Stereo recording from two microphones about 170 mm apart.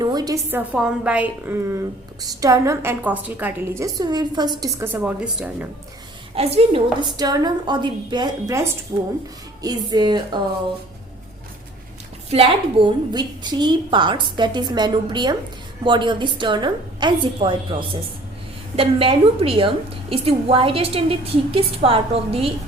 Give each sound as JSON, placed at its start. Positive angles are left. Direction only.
{"t": 0.0, "sound": "a sound", "side_deg": -25}
{"t": 0.5, "sound": "a woman's voice", "side_deg": -5}
{"t": 4.9, "sound": "a woman's voice", "side_deg": -5}
{"t": 6.3, "sound": "a woman's voice", "side_deg": -35}
{"t": 7.2, "sound": "a woman's voice", "side_deg": -25}
{"t": 13.1, "sound": "a woman's voice", "side_deg": -25}